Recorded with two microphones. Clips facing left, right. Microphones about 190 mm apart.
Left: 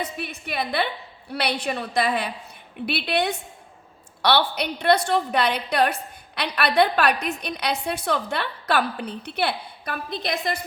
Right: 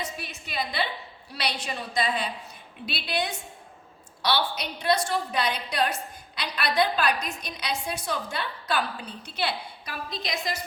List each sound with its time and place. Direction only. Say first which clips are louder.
0.0 s a woman's voice: left 5 dB; 60° left (ahead or behind)